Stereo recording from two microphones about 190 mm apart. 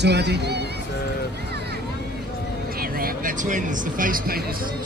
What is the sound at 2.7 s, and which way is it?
Speech, 50° right (ahead or behind).